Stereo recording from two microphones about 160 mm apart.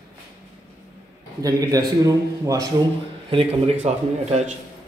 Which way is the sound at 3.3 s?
35° right (ahead or behind).